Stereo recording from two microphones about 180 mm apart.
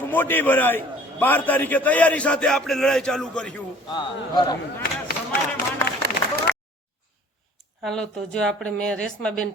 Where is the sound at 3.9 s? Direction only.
25° left (ahead or behind).